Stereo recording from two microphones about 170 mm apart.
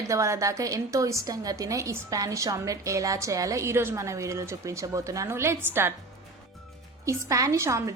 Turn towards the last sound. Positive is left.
turn(degrees=-15)  # may be behind; listen again after turning